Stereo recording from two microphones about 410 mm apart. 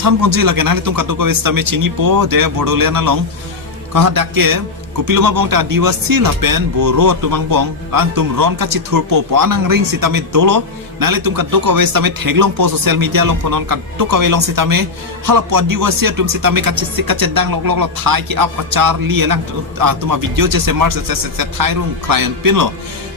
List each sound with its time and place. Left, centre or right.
0.0 s a man's voice: right